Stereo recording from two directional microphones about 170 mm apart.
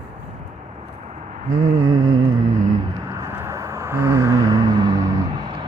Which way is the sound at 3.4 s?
15° right (ahead or behind).